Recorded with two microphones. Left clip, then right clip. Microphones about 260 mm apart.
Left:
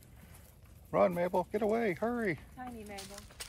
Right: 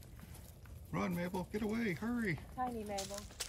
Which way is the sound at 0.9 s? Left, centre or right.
Centre.